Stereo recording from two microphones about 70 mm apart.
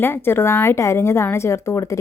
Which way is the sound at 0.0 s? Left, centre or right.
Left.